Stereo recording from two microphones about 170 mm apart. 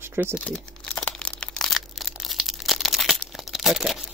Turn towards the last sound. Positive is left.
turn(degrees=0)  # may be behind; listen again after turning